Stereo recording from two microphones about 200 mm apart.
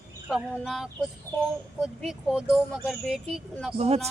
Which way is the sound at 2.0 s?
Centre (ahead or behind).